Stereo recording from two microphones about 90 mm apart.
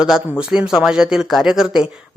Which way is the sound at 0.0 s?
5° right (ahead or behind).